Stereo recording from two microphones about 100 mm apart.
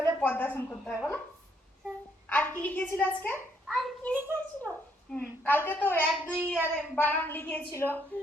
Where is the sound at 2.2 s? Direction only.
15° left (ahead or behind).